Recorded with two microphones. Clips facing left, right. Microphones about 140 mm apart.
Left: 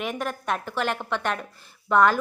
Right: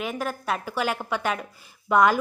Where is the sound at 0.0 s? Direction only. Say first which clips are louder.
Even; centre (ahead or behind).